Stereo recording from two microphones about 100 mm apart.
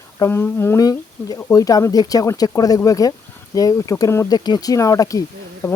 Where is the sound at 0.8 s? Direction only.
35° left (ahead or behind).